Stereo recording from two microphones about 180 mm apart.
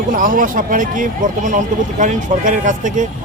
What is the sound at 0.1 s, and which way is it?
Speech, 50° right (ahead or behind).